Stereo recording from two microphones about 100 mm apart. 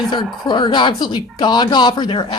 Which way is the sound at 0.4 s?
50° left (ahead or behind).